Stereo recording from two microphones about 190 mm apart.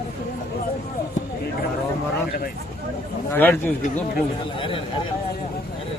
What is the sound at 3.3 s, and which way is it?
Speech, 10° left (ahead or behind).